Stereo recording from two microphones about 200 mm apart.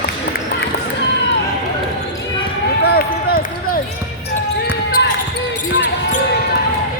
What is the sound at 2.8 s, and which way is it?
Run, 50° left (ahead or behind).